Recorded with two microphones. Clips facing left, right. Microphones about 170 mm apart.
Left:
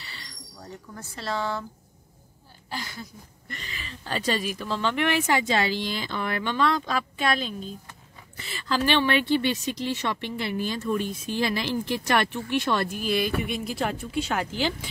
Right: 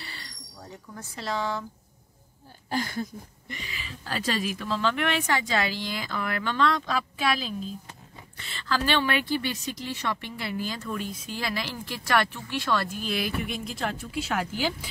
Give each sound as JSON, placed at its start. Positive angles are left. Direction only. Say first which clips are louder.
{"t": 0.9, "sound": "speech", "louder": "even", "side_deg": -15}
{"t": 2.7, "sound": "a sound", "louder": "right 7 dB", "side_deg": -50}
{"t": 3.4, "sound": "speech", "louder": "left 2 dB", "side_deg": -10}
{"t": 5.4, "sound": "speech", "louder": "left 3 dB", "side_deg": 25}
{"t": 6.5, "sound": "speech", "louder": "even", "side_deg": 5}
{"t": 8.6, "sound": "speech", "louder": "left 2 dB", "side_deg": 20}
{"t": 13.0, "sound": "speech", "louder": "left 4 dB", "side_deg": 0}